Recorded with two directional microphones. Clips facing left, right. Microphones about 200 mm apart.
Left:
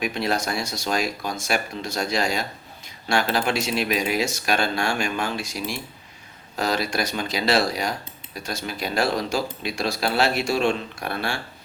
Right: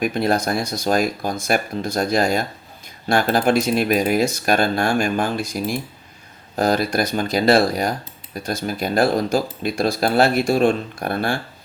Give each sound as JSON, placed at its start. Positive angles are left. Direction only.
{"t": 0.0, "sound": "speech", "side_deg": -50}